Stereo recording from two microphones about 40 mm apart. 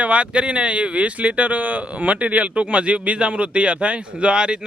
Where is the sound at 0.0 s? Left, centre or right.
Right.